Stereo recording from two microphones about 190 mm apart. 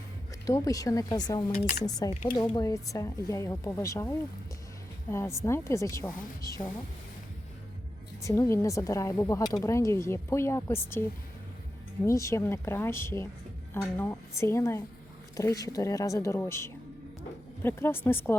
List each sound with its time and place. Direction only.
0.4 s speech: 15° left (ahead or behind)
8.2 s speech: 15° left (ahead or behind)
12.0 s speech: 15° left (ahead or behind)